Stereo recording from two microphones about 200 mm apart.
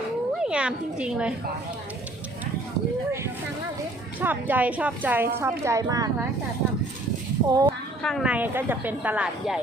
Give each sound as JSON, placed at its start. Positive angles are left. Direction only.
{"t": 0.3, "sound": "speech", "side_deg": -5}
{"t": 4.2, "sound": "a woman's voice", "side_deg": -10}
{"t": 7.4, "sound": "a woman's voice", "side_deg": -20}
{"t": 8.0, "sound": "a woman's voice", "side_deg": 0}